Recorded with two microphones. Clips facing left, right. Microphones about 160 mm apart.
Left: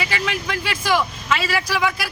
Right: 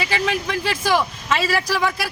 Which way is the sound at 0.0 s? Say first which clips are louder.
Right 3 dB; 30° right (ahead or behind).